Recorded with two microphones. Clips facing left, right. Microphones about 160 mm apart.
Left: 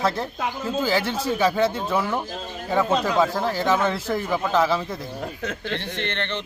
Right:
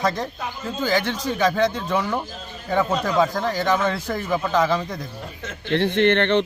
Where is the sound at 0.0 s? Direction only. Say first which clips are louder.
Even; 5° left (ahead or behind).